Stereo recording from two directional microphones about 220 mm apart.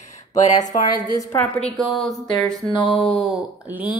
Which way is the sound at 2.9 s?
Centre (ahead or behind).